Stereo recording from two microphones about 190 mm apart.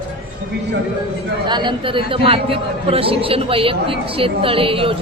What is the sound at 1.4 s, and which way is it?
A man's voice, 25° right (ahead or behind).